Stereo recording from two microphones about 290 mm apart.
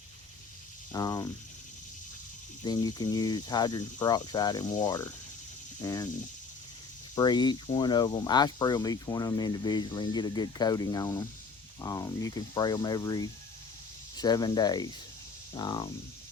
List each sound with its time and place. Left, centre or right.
0.9 s speech: centre
2.6 s speech: centre
7.2 s speech: centre